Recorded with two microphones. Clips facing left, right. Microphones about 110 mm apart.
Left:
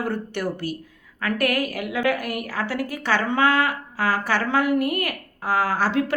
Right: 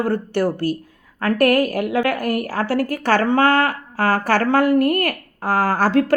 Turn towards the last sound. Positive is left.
turn(degrees=-45)  # may be behind; listen again after turning